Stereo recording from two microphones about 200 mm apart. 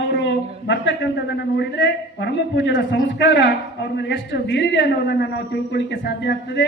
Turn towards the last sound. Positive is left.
turn(degrees=55)  # may be behind; listen again after turning